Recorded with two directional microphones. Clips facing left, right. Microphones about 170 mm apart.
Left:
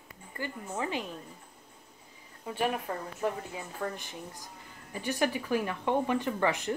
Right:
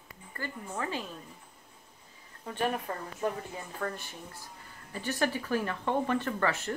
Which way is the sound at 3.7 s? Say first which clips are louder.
Even; 15° left (ahead or behind).